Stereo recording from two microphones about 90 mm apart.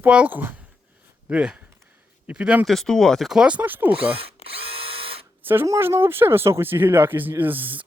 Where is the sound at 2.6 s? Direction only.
5° left (ahead or behind); by 4.2 s 15° right (ahead or behind).